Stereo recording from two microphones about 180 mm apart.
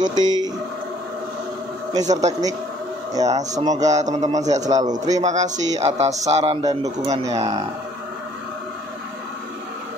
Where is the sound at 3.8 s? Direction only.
40° right (ahead or behind).